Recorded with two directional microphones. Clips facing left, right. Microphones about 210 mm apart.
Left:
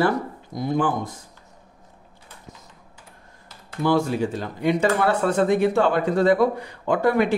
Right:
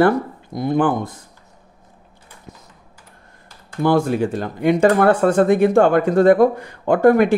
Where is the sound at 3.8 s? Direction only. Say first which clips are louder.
Right 4 dB; 55° right (ahead or behind).